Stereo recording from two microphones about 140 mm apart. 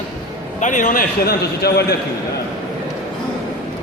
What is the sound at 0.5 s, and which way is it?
A man's voice, 65° left (ahead or behind).